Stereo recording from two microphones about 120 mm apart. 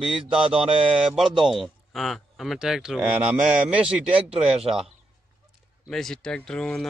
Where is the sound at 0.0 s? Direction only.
5° right (ahead or behind).